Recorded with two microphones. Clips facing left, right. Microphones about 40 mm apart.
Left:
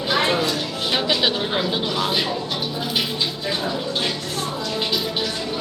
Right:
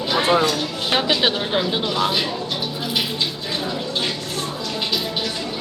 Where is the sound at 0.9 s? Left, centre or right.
Right.